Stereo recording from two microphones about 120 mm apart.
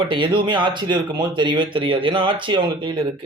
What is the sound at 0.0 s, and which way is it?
Speech, 45° right (ahead or behind).